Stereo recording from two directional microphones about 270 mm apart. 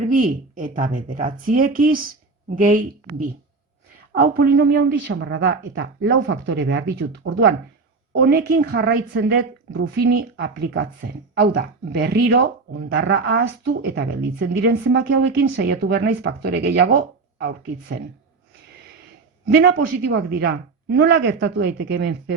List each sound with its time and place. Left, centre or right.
0.1 s speech: right
4.2 s a woman's voice: right
19.5 s a woman's voice: right